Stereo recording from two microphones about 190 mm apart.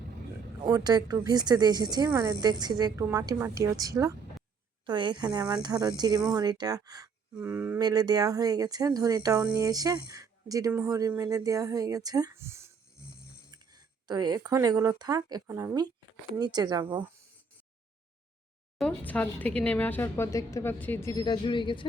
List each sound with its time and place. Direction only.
0.6 s speech: 20° right (ahead or behind)
13.0 s snoring: 55° left (ahead or behind)
13.5 s speech: 20° right (ahead or behind)
18.8 s speech: 5° left (ahead or behind); by 21.8 s 25° left (ahead or behind)